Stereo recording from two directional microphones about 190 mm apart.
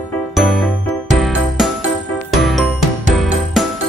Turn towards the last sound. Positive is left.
turn(degrees=0)  # may be behind; listen again after turning